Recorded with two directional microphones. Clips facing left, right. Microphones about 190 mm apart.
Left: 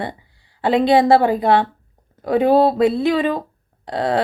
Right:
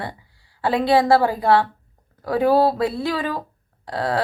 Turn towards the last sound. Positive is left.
turn(degrees=20)  # may be behind; listen again after turning